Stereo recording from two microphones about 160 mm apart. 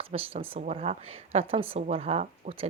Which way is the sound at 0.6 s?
55° right (ahead or behind).